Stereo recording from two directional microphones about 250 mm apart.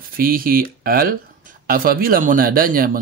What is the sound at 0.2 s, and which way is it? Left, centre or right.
Speech, right.